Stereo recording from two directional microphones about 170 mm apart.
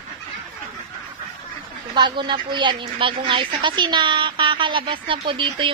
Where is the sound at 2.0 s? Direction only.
25° right (ahead or behind).